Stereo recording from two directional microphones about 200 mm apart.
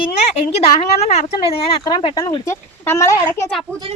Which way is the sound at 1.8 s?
20° left (ahead or behind).